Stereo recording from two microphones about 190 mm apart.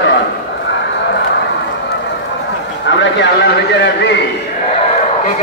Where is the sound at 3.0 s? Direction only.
70° left (ahead or behind).